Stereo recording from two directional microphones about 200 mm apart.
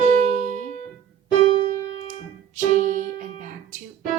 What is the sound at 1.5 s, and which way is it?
Music, 25° left (ahead or behind).